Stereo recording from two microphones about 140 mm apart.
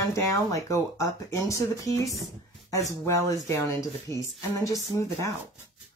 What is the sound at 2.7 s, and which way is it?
Speech, 20° left (ahead or behind).